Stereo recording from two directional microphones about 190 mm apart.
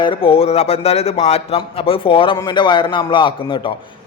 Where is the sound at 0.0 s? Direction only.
30° left (ahead or behind).